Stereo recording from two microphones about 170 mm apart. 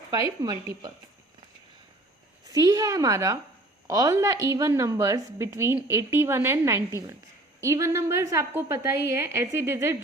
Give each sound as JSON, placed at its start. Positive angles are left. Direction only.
{"t": 0.1, "sound": "a woman's voice", "side_deg": -25}
{"t": 2.5, "sound": "a woman's voice", "side_deg": -20}